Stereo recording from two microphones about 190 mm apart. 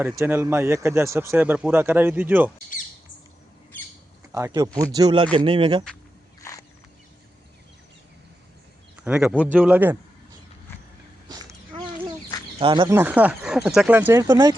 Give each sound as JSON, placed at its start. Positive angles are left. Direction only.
{"t": 0.1, "sound": "speech", "side_deg": -15}
{"t": 4.3, "sound": "speech", "side_deg": -15}
{"t": 6.4, "sound": "a sound", "side_deg": 15}
{"t": 9.0, "sound": "speech", "side_deg": -5}
{"t": 12.5, "sound": "speech", "side_deg": -25}
{"t": 12.9, "sound": "speech", "side_deg": -10}